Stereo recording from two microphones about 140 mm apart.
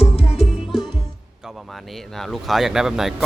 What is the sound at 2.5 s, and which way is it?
Speech, centre (ahead or behind).